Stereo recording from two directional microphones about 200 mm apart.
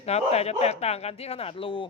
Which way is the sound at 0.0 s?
30° left (ahead or behind).